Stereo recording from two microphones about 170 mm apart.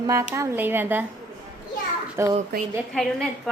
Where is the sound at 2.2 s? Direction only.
15° right (ahead or behind).